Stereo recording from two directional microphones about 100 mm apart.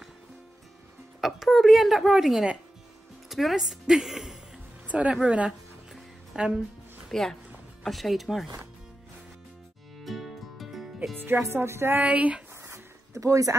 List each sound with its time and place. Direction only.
1.2 s a sound: centre (ahead or behind)
3.3 s a woman's voice: centre (ahead or behind)
4.8 s speech: 15° right (ahead or behind)
5.9 s music: 5° right (ahead or behind)
7.1 s a woman's voice: 5° left (ahead or behind)
10.0 s music: centre (ahead or behind)
11.4 s speech: 25° right (ahead or behind)
12.6 s a sound: 30° right (ahead or behind)